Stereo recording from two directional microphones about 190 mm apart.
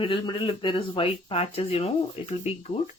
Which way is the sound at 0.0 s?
25° left (ahead or behind).